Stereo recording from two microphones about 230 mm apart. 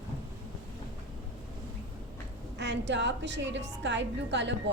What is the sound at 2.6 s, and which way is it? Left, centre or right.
A woman's voice, right.